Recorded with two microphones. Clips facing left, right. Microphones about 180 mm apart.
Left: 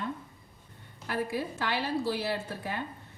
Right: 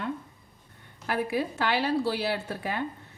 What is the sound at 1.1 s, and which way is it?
A woman's voice, 70° right (ahead or behind).